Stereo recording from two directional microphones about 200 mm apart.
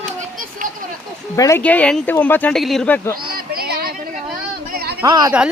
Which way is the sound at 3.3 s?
50° right (ahead or behind).